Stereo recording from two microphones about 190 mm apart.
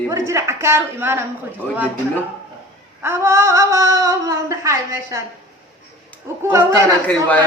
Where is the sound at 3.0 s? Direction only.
15° right (ahead or behind).